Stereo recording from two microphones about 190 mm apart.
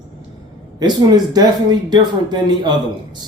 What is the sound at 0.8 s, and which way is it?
Speech, 20° right (ahead or behind).